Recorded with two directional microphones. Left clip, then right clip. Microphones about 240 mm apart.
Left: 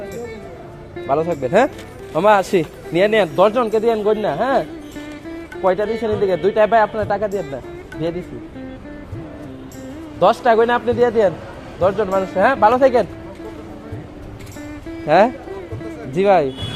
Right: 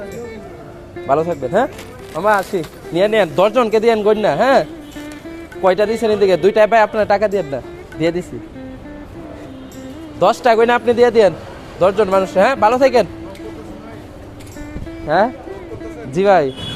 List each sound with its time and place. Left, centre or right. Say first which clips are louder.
0.9 s speech: right 2 dB; centre
2.2 s speech: left 1 dB; left
2.9 s speech: right 1 dB; centre
3.3 s speech: right 2 dB; centre
5.6 s speech: right 4 dB; centre
10.2 s speech: right 1 dB; centre
15.0 s speech: left 2 dB; centre
16.1 s speech: right 2 dB; centre